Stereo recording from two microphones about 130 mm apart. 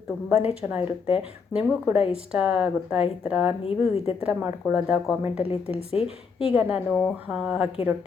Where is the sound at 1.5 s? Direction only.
5° right (ahead or behind).